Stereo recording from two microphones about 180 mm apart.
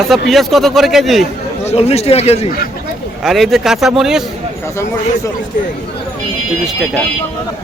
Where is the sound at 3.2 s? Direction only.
Centre (ahead or behind).